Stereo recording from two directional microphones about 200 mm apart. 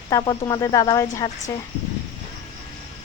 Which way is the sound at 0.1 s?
20° left (ahead or behind).